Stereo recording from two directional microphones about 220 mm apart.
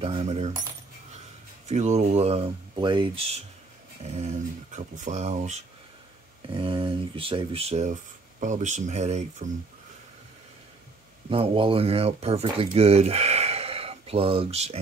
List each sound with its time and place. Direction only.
0.0 s speech: 25° right (ahead or behind)
1.7 s speech: 30° right (ahead or behind)
11.2 s speech: 25° right (ahead or behind)